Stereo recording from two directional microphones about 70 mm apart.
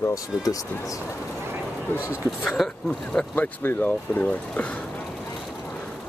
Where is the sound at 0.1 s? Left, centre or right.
Left.